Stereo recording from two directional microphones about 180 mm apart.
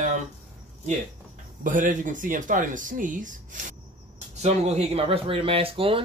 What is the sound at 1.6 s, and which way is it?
Speech, 45° right (ahead or behind).